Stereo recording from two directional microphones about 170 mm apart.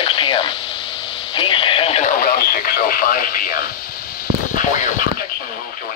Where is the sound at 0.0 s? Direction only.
30° left (ahead or behind).